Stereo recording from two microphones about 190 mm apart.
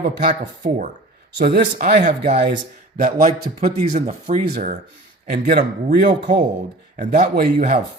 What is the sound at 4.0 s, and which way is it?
A man's voice, 40° right (ahead or behind).